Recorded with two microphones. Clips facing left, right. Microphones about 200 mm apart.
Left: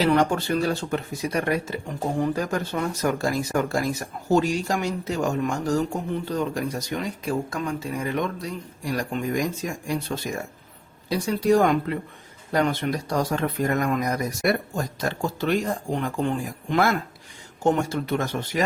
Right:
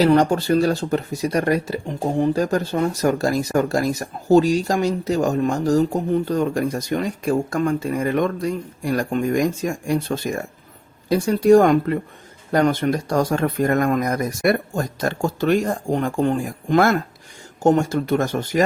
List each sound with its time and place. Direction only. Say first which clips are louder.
0.0 s speech: right 5 dB; 35° right (ahead or behind)
2.1 s speech: right 5 dB; 25° right (ahead or behind)
2.4 s speech: right 6 dB; 35° right (ahead or behind)